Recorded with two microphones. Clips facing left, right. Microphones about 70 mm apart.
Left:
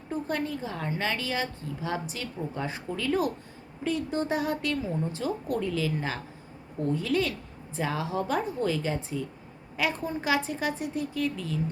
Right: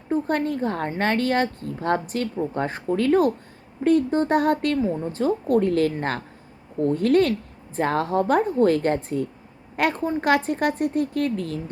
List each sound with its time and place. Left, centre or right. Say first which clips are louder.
0.1 s a woman's voice: right 8 dB; right
4.9 s a woman's voice: right 7 dB; right